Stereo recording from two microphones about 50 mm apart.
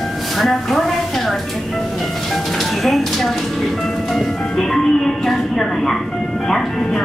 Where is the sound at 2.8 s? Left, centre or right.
Centre.